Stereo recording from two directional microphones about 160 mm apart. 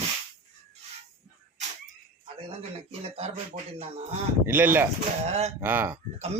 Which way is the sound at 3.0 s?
40° right (ahead or behind).